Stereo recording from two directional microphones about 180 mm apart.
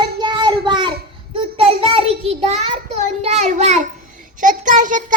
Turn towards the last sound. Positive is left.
turn(degrees=-45)  # may be behind; listen again after turning